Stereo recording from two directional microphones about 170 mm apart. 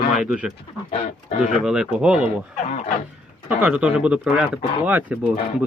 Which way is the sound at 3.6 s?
5° right (ahead or behind).